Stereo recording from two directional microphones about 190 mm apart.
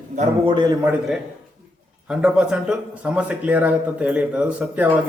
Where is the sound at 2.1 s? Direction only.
5° right (ahead or behind).